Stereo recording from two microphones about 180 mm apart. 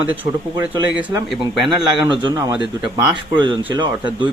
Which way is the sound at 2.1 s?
25° right (ahead or behind).